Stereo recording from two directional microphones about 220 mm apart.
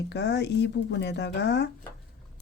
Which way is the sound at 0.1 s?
50° left (ahead or behind).